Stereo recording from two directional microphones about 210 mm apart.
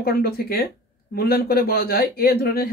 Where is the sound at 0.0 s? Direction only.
45° left (ahead or behind).